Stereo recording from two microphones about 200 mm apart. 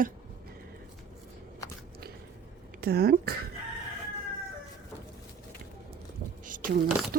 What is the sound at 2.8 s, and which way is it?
Speech, 50° right (ahead or behind).